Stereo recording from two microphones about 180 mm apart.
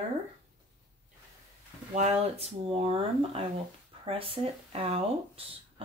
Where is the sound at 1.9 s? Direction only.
40° right (ahead or behind).